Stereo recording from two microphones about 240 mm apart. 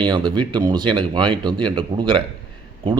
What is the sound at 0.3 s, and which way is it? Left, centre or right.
Speech, centre.